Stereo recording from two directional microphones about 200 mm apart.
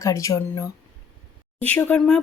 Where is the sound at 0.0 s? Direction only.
15° left (ahead or behind).